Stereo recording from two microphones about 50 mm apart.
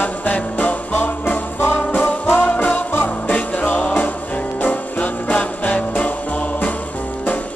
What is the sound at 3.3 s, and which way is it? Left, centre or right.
Music, left.